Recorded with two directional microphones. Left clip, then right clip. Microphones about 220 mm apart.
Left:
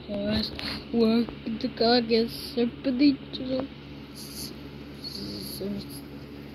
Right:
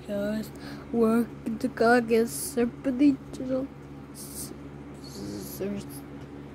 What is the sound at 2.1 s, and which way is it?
Speech, 40° right (ahead or behind).